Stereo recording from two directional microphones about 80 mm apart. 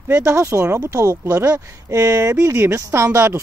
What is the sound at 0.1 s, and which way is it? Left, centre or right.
Speech, right.